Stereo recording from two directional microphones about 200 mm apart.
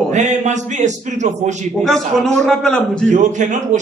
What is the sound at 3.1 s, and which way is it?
Speech, 35° right (ahead or behind).